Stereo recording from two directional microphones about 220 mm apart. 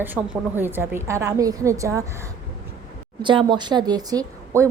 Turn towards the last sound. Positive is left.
turn(degrees=-15)  # may be behind; listen again after turning